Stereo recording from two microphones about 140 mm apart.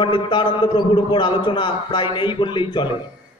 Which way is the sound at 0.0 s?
35° left (ahead or behind).